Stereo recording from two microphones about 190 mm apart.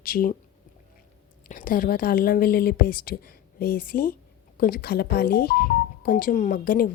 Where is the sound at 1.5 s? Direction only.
45° left (ahead or behind).